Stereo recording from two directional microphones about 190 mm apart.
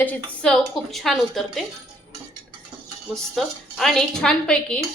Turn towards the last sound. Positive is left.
turn(degrees=5)  # may be behind; listen again after turning